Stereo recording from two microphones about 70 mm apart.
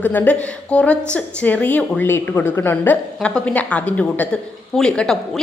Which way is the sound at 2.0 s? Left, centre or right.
Left.